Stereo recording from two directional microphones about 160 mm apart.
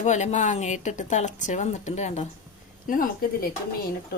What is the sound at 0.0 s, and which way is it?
Speech, 45° left (ahead or behind).